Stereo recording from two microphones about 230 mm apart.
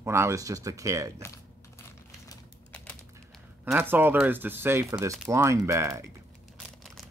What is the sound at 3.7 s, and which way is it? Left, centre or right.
Speech, centre.